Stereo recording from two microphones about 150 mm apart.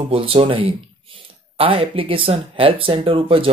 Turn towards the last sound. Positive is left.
turn(degrees=-35)  # may be behind; listen again after turning